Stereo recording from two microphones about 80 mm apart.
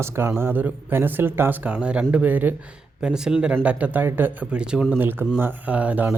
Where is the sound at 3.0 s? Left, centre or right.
Centre; by 4.5 s right.